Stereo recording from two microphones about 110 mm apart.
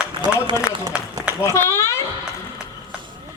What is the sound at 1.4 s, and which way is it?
Speech, 25° left (ahead or behind).